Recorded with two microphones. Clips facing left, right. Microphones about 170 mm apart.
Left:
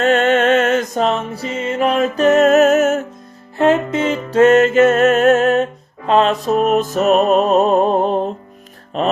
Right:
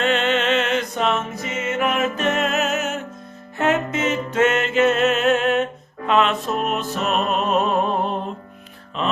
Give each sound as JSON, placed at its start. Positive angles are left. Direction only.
{"t": 0.0, "sound": "music", "side_deg": 45}
{"t": 3.6, "sound": "music", "side_deg": 30}